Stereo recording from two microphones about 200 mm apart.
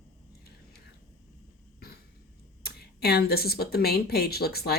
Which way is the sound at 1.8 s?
50° left (ahead or behind).